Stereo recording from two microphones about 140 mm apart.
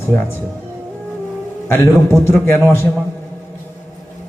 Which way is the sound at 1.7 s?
15° left (ahead or behind).